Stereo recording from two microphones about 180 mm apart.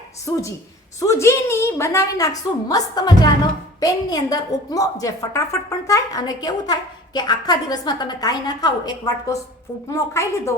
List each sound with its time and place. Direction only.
0.9 s a woman's voice: 15° left (ahead or behind)